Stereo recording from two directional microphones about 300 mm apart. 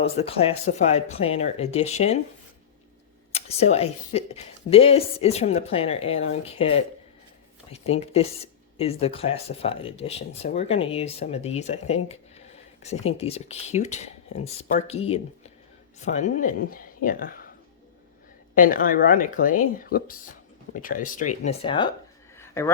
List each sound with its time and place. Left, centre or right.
0.0 s speech: centre
3.3 s speech: left
18.5 s speech: left
22.4 s a sound: centre